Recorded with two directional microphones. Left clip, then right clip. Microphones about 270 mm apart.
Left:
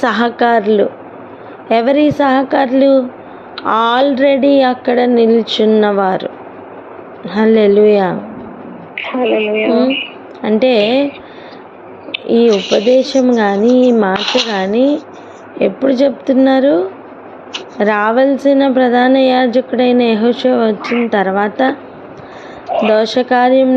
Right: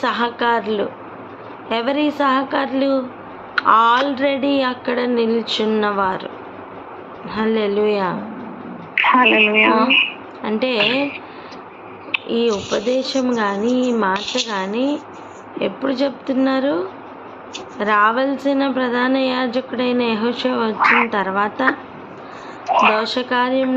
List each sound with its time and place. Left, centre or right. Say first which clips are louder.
0.0 s a woman's voice: left 6 dB; left
9.0 s a woman's voice: right 2 dB; centre
10.4 s a woman's voice: left 7 dB; left
12.2 s a woman's voice: left 10 dB; left
22.9 s a woman's voice: left 6 dB; left